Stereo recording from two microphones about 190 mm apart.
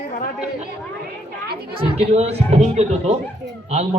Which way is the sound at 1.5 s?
55° right (ahead or behind).